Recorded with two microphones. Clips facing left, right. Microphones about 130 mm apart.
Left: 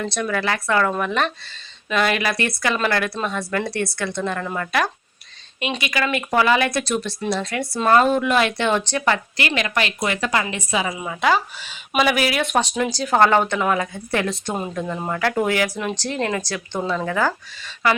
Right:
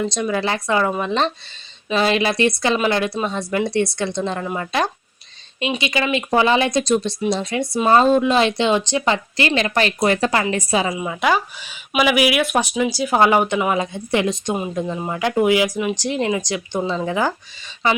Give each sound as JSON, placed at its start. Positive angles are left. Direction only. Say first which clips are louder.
{"t": 0.0, "sound": "speech", "louder": "right 2 dB", "side_deg": -15}
{"t": 10.8, "sound": "speech", "louder": "right 1 dB", "side_deg": -15}